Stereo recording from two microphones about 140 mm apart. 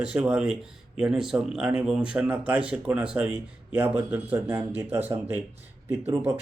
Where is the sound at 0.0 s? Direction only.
10° right (ahead or behind).